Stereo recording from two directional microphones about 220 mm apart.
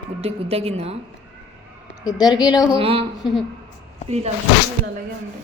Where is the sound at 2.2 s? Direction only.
20° left (ahead or behind).